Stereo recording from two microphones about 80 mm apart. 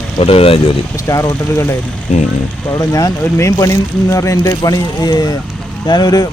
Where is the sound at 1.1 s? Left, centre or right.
Left.